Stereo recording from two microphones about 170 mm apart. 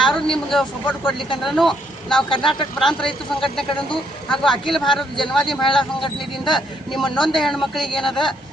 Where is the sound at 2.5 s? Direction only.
30° left (ahead or behind).